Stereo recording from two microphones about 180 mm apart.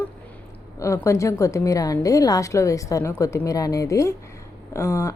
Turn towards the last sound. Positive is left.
turn(degrees=15)  # may be behind; listen again after turning